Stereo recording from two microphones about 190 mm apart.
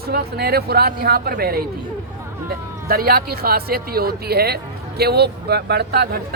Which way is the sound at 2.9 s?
50° right (ahead or behind).